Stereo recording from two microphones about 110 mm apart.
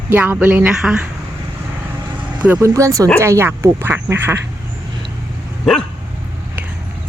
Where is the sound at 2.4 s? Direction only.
15° right (ahead or behind).